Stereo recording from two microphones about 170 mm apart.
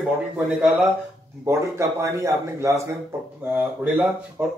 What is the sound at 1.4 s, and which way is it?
A man's voice, 15° right (ahead or behind).